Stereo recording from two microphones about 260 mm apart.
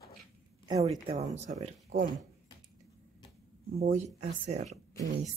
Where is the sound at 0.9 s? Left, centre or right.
Centre.